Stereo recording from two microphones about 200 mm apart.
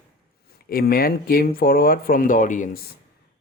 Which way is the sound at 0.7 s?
50° left (ahead or behind).